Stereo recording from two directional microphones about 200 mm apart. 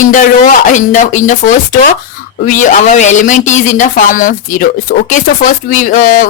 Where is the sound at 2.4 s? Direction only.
40° left (ahead or behind).